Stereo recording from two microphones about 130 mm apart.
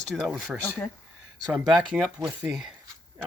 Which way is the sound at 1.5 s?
5° right (ahead or behind).